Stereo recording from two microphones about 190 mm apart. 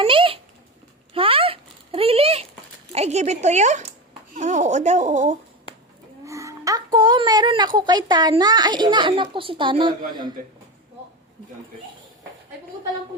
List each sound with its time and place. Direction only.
0.0 s a sound: 30° right (ahead or behind)
2.9 s speech: 35° right (ahead or behind)
6.2 s a woman's voice: 15° right (ahead or behind)